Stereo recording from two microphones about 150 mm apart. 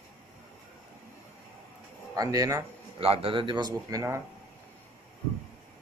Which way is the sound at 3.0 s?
40° right (ahead or behind).